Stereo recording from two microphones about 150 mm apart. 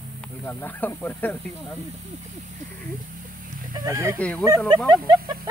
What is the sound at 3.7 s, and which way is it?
Speech, 25° right (ahead or behind).